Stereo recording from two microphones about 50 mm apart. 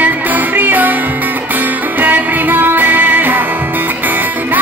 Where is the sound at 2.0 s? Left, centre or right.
Right.